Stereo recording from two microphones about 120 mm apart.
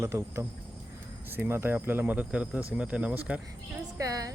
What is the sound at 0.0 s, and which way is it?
Speech, 25° right (ahead or behind).